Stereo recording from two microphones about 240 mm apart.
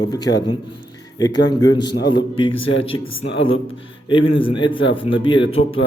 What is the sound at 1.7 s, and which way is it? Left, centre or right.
Speech, centre.